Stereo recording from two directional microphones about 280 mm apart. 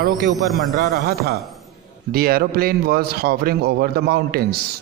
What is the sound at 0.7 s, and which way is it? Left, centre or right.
A man's voice, right.